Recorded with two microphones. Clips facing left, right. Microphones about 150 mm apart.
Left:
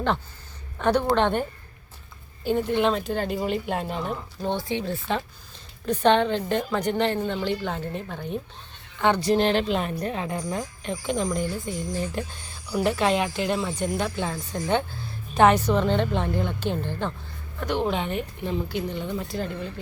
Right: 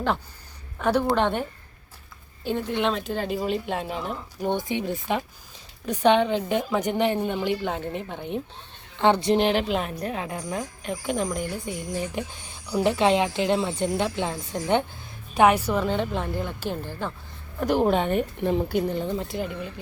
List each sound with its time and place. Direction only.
0.8 s a woman's voice: 5° right (ahead or behind)
2.5 s a woman's voice: centre (ahead or behind)
4.4 s a woman's voice: 15° right (ahead or behind)
9.4 s a woman's voice: 10° right (ahead or behind)
15.4 s a woman's voice: 10° right (ahead or behind)
17.6 s a woman's voice: 40° right (ahead or behind)
19.1 s speech: 20° right (ahead or behind)